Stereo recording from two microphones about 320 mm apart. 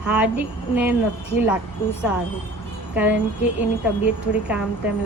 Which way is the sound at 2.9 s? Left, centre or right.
Centre.